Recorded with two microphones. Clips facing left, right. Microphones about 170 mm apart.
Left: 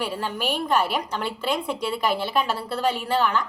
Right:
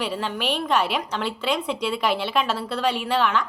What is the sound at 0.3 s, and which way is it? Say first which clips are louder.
A woman's voice: even; 5° left (ahead or behind).